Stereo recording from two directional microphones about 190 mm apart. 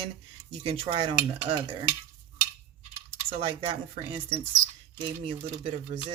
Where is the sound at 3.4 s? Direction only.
30° right (ahead or behind).